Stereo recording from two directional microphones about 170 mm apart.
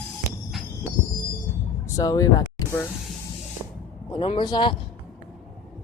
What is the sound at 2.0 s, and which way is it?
Speech, 20° left (ahead or behind).